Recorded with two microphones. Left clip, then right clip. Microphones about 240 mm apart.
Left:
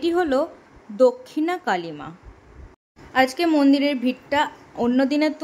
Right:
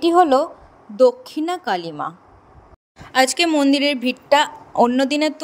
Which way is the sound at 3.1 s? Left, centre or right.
Right.